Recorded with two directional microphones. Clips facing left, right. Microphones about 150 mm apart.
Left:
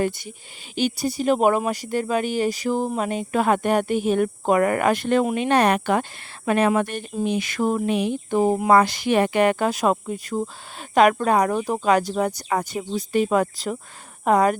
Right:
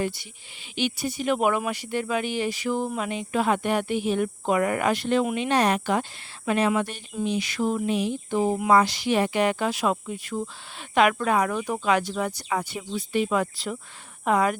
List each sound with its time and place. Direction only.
0.0 s speech: 50° left (ahead or behind)